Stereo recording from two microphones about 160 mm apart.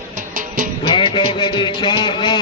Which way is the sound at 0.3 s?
55° right (ahead or behind).